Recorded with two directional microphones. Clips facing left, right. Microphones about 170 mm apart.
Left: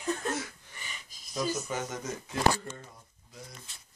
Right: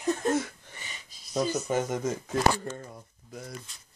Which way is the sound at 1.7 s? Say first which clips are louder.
Right 7 dB; 50° right (ahead or behind).